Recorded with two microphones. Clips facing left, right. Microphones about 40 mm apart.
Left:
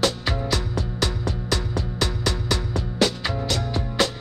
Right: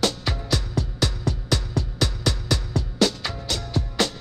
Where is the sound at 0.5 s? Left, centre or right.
Left.